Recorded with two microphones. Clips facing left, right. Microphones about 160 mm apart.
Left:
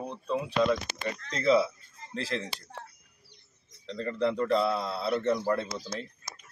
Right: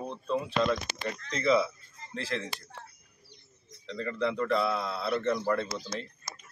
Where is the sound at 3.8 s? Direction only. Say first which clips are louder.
Left 2 dB; 35° left (ahead or behind).